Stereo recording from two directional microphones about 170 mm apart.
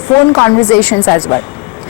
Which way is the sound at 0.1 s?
20° left (ahead or behind).